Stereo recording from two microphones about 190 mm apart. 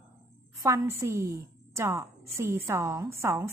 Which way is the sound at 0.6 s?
15° right (ahead or behind).